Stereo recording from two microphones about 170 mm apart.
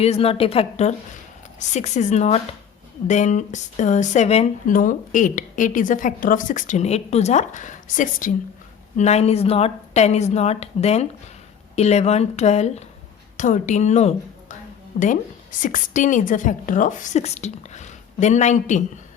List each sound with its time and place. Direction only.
0.0 s speech: 35° left (ahead or behind)
9.0 s speech: 40° left (ahead or behind)